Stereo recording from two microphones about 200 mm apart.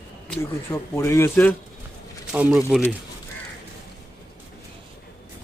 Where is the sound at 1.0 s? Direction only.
15° left (ahead or behind).